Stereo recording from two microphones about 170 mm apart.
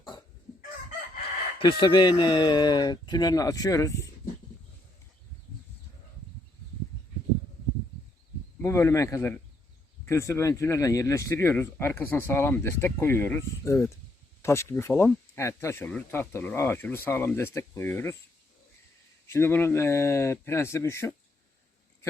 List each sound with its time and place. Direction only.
1.5 s speech: 30° left (ahead or behind)
8.6 s speech: 15° left (ahead or behind)
19.3 s speech: 15° left (ahead or behind)